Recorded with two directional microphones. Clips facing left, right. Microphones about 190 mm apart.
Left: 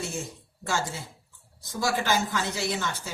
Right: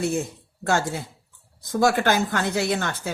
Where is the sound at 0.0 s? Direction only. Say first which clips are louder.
Right 9 dB; 60° right (ahead or behind).